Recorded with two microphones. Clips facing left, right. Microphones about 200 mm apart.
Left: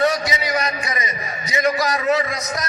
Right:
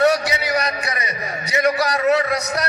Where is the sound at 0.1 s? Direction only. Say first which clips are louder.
Right 3 dB; 65° right (ahead or behind).